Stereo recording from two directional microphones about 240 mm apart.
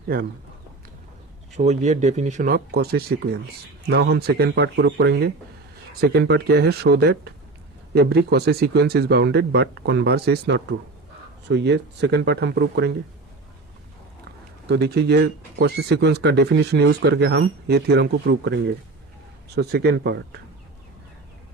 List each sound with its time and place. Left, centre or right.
0.1 s speech: right
1.5 s speech: right
14.7 s speech: right